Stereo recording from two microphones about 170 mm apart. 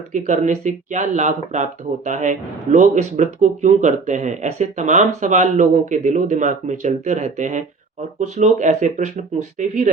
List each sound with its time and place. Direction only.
0.1 s speech: 45° right (ahead or behind)